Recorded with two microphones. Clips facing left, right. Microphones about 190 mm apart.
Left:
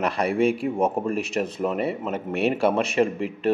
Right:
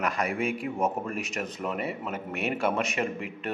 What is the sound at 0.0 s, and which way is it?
Speech, 30° left (ahead or behind).